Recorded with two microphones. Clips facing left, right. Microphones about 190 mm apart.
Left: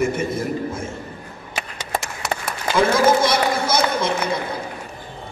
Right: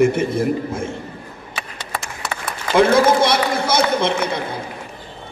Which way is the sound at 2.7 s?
60° right (ahead or behind).